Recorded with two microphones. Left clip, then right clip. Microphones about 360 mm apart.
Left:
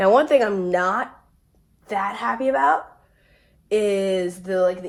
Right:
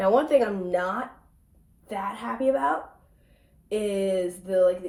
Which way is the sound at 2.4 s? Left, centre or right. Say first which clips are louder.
Left 2 dB; centre.